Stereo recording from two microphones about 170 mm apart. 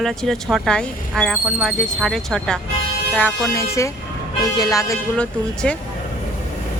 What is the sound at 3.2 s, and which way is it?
Speech, 15° left (ahead or behind).